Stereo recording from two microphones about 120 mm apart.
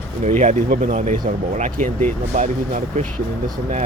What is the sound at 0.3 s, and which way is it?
Speech, 90° right.